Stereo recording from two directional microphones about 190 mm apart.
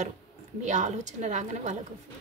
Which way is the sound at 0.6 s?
40° right (ahead or behind).